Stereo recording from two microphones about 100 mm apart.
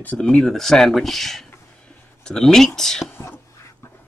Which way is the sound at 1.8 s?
5° left (ahead or behind).